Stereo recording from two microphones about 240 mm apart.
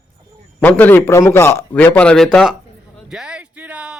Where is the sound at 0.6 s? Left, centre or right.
Centre.